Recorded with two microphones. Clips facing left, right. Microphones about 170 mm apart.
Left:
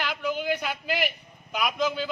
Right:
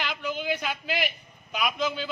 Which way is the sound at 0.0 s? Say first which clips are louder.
Left 2 dB; 10° left (ahead or behind).